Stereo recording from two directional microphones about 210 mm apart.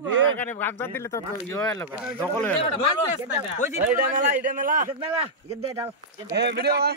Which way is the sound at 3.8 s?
40° right (ahead or behind).